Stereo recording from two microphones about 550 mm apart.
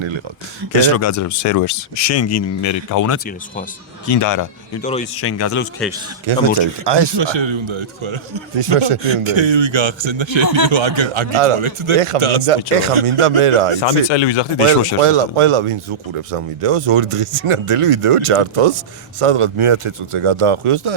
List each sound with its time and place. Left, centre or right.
0.8 s speech: left
4.2 s speech: left
4.8 s speech: centre
5.1 s speech: left
6.3 s a man's voice: right
6.8 s a man's voice: right
10.4 s speech: left
10.7 s a man's voice: right
13.8 s speech: left
15.0 s a man's voice: right